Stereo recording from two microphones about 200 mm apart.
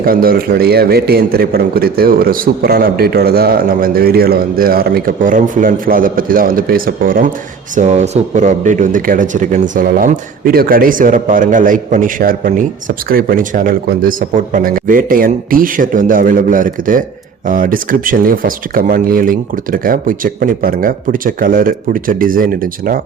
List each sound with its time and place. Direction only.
0.0 s a man's voice: 45° right (ahead or behind)
7.8 s a man's voice: 35° right (ahead or behind)